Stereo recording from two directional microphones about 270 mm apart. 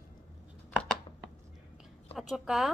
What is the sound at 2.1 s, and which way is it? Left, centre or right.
Speech, centre.